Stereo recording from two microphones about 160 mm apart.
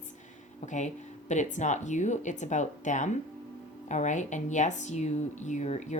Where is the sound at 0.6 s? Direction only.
50° left (ahead or behind).